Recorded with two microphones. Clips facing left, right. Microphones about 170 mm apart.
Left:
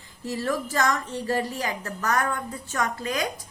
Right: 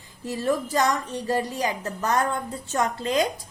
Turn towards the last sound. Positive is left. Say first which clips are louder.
# right 4 dB
turn(degrees=-25)  # may be behind; listen again after turning